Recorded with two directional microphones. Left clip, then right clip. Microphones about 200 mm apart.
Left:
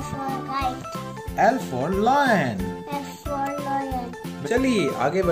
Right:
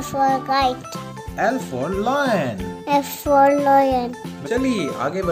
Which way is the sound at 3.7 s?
55° right (ahead or behind).